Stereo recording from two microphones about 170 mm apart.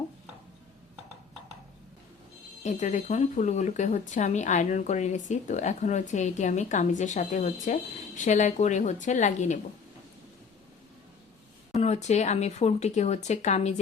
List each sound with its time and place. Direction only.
2.6 s speech: 45° left (ahead or behind)
11.7 s speech: 40° left (ahead or behind)